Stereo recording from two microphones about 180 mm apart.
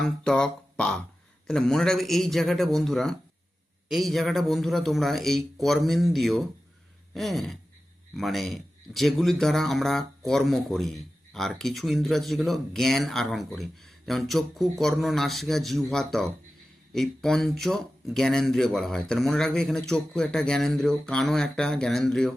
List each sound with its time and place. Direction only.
0.0 s a man's voice: 5° left (ahead or behind)